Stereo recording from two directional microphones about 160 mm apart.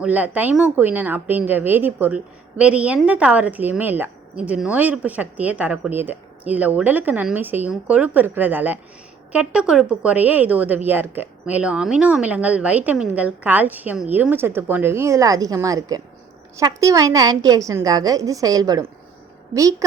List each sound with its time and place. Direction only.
0.0 s a woman's voice: 10° right (ahead or behind)